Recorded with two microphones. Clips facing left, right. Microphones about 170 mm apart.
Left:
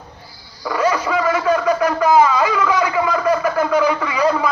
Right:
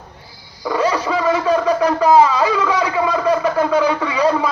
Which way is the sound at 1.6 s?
30° right (ahead or behind).